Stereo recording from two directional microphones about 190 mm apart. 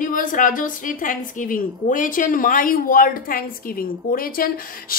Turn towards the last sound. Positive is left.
turn(degrees=50)  # may be behind; listen again after turning